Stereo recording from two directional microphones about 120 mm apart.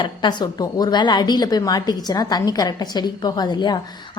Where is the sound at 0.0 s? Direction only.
40° left (ahead or behind).